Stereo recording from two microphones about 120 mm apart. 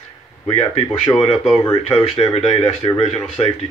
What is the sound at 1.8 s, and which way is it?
Speech, 55° left (ahead or behind).